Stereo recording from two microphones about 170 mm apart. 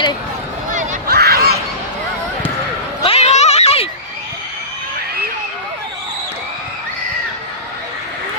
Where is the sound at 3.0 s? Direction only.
35° left (ahead or behind).